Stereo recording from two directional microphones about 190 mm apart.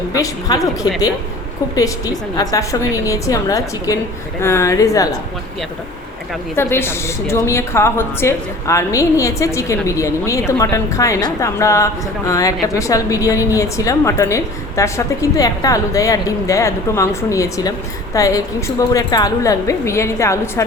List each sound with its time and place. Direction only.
0.1 s a woman's voice: 20° left (ahead or behind)
6.6 s a woman's voice: 10° left (ahead or behind)